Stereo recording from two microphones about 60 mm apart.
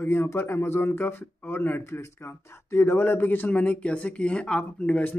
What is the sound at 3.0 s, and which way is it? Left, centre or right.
Speech, left.